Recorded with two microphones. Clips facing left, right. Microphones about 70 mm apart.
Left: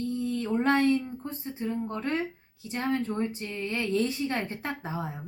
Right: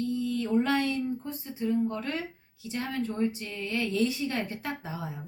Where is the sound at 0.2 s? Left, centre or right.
Left.